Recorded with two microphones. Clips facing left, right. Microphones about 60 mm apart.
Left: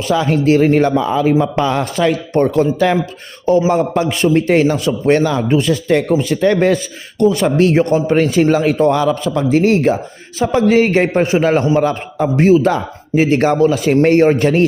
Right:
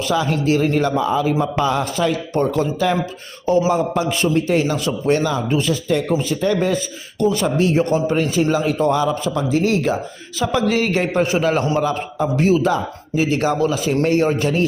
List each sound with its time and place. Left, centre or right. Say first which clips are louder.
0.1 s a man's voice: left 6 dB; left